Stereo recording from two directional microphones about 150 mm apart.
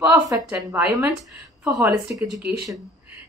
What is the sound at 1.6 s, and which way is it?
Speech, 20° right (ahead or behind).